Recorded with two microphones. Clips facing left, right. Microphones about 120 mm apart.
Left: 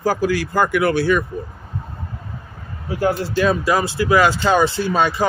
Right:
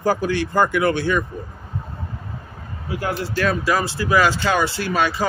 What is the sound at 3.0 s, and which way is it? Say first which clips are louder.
Speech: left 5 dB; 20° left (ahead or behind).